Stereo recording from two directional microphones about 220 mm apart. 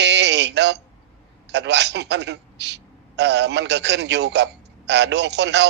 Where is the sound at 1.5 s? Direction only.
50° right (ahead or behind).